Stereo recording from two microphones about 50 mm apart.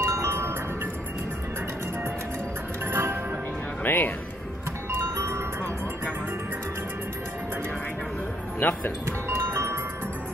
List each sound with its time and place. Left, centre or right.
0.0 s music: right
2.9 s music: right
3.8 s speech: left
4.9 s music: right
8.5 s speech: left
9.3 s music: right